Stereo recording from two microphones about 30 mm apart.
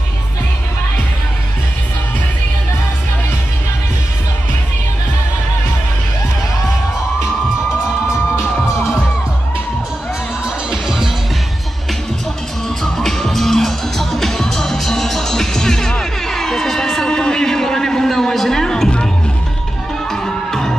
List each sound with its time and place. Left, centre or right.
10.7 s music: centre
12.6 s music: centre
20.1 s music: centre